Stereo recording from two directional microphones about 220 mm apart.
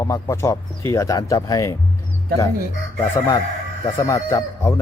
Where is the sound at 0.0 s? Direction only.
15° left (ahead or behind).